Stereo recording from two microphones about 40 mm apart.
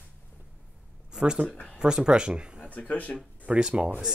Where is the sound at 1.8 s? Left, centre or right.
Right.